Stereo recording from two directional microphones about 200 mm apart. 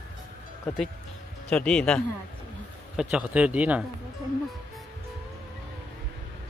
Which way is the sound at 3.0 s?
5° right (ahead or behind).